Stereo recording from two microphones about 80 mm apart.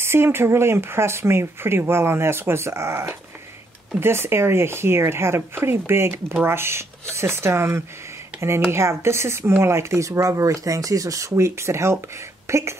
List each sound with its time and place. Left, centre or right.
0.0 s speech: right